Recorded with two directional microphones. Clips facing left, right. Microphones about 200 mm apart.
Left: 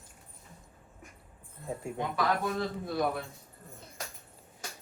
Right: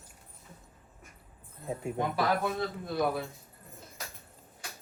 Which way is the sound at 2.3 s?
Centre (ahead or behind).